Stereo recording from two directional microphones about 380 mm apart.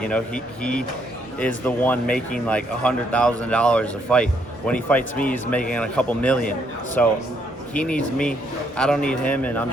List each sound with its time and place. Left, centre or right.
0.0 s speech: centre